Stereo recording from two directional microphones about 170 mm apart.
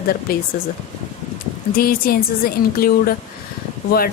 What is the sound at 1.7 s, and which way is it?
Speech, 60° left (ahead or behind).